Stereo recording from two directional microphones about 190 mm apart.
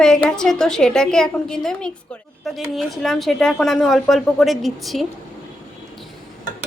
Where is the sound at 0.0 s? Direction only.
5° left (ahead or behind).